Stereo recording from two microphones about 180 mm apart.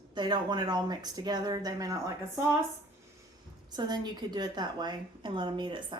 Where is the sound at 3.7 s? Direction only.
25° right (ahead or behind).